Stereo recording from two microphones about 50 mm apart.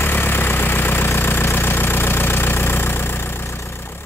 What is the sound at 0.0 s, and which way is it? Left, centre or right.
Vehicle, left.